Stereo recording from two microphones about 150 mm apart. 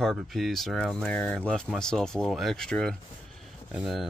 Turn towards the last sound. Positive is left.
turn(degrees=-5)  # may be behind; listen again after turning